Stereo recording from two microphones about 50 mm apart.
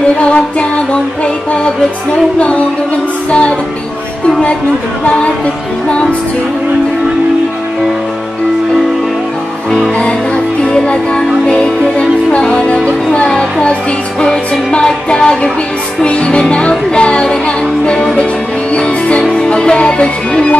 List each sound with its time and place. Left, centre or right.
0.2 s music: left
2.3 s music: left
9.9 s music: left